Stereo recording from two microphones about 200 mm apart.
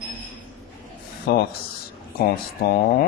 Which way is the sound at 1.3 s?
50° left (ahead or behind).